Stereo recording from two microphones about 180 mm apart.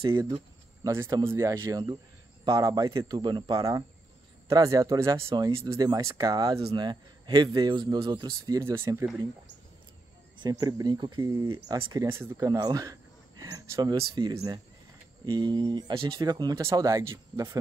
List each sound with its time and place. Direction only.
0.0 s speech: 25° right (ahead or behind)
10.3 s speech: 25° right (ahead or behind)
15.3 s speech: 25° right (ahead or behind)